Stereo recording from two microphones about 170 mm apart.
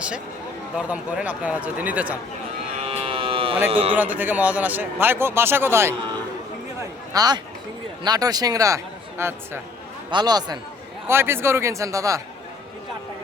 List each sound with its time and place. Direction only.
0.8 s a man's voice: 5° right (ahead or behind)
2.8 s a sound: 35° right (ahead or behind)
3.7 s speech: 35° right (ahead or behind)
3.9 s a man's voice: 10° right (ahead or behind)
7.1 s a man's voice: 25° right (ahead or behind)
10.1 s a man's voice: 25° right (ahead or behind)